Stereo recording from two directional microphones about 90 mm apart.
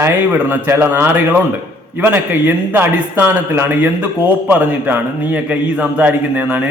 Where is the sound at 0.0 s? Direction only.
20° right (ahead or behind).